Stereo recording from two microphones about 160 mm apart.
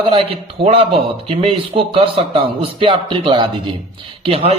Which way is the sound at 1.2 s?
35° right (ahead or behind).